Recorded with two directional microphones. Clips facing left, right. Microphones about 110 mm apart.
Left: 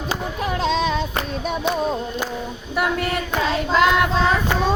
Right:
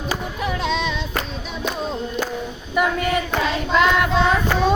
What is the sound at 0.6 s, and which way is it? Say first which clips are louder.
Music: left 4 dB; 40° left (ahead or behind).